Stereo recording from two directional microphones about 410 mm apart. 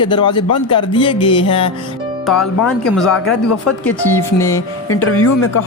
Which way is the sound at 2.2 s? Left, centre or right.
Centre.